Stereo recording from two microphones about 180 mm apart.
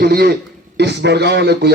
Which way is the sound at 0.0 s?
60° right (ahead or behind).